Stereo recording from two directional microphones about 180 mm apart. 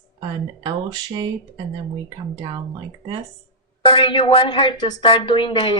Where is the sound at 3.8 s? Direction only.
30° left (ahead or behind).